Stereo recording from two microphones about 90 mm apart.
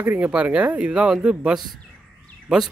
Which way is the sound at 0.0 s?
20° right (ahead or behind).